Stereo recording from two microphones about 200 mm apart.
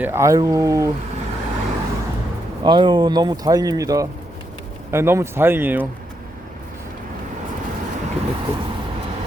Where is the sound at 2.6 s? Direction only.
25° right (ahead or behind).